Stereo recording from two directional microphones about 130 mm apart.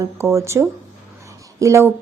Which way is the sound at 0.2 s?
20° right (ahead or behind).